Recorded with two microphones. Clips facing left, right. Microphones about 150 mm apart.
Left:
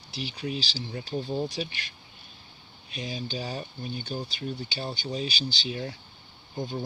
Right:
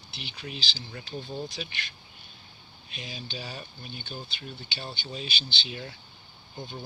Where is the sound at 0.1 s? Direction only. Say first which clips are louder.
Left 8 dB; 35° left (ahead or behind).